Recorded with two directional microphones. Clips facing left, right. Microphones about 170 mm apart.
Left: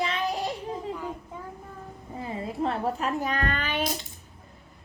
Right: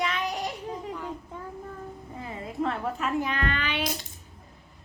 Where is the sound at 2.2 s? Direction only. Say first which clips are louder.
Left 2 dB; 30° left (ahead or behind).